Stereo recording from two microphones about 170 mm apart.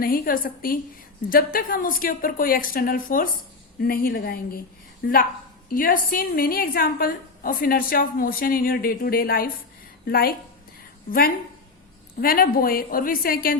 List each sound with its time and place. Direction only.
0.0 s a woman's voice: 55° left (ahead or behind)
12.2 s a woman's voice: 55° left (ahead or behind)